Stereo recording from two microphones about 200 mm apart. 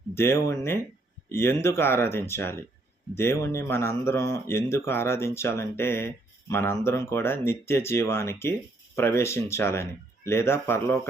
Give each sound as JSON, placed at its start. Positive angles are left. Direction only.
{"t": 0.1, "sound": "speech", "side_deg": 10}